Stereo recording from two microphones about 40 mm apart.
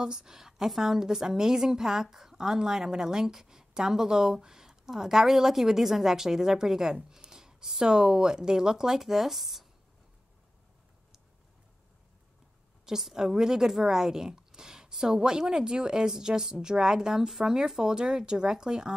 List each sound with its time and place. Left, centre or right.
0.0 s a woman's voice: centre
7.1 s a sound: centre
7.8 s a woman's voice: centre
12.8 s a woman's voice: centre